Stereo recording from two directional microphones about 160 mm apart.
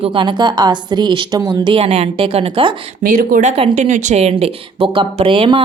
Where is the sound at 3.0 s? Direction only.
60° right (ahead or behind).